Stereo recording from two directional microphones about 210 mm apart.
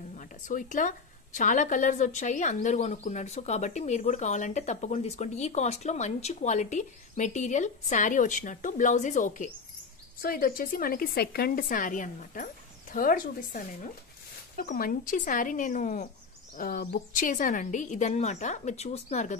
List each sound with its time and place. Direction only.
0.2 s a woman's voice: 40° left (ahead or behind)